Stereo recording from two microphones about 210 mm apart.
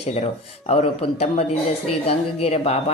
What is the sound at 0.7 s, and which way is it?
A woman's voice, 30° left (ahead or behind).